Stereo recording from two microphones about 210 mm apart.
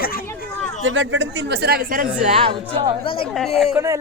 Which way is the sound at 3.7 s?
15° right (ahead or behind).